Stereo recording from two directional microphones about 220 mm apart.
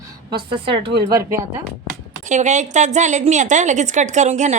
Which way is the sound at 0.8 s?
50° right (ahead or behind).